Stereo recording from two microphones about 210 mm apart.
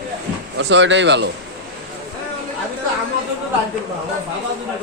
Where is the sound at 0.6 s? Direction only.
60° right (ahead or behind).